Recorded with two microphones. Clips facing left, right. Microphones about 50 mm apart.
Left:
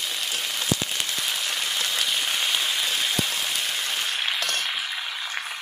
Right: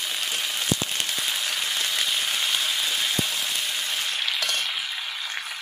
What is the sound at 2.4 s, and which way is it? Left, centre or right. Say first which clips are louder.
Rain: left 1 dB; centre.